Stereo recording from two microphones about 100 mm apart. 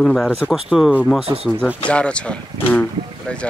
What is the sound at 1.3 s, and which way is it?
Speech, 40° right (ahead or behind).